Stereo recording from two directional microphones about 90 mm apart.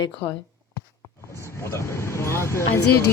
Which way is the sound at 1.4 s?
30° left (ahead or behind).